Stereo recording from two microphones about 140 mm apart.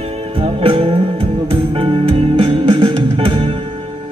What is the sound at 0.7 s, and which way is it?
Music, 40° right (ahead or behind).